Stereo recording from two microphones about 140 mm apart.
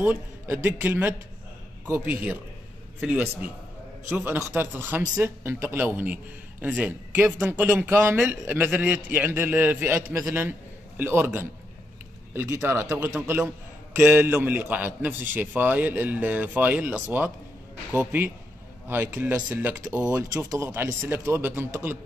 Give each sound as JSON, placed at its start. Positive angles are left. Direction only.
{"t": 0.0, "sound": "a man's voice", "side_deg": -15}